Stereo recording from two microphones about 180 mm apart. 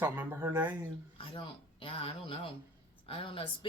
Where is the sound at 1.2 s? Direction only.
30° left (ahead or behind).